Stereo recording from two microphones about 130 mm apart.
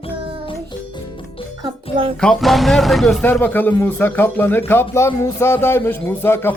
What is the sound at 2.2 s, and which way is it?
Speech, 5° left (ahead or behind).